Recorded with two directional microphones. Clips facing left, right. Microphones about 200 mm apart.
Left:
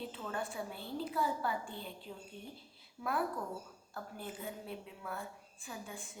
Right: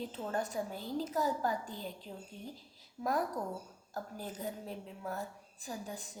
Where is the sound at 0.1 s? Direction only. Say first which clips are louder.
Right 4 dB; 40° right (ahead or behind).